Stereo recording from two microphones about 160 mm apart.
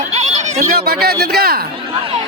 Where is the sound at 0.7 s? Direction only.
80° right.